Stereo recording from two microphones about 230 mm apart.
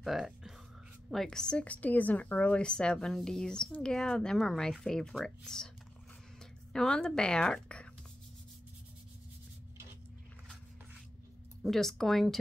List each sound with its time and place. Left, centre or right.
0.0 s music: centre
1.1 s a woman's voice: centre
6.7 s speech: centre
11.6 s a woman's voice: centre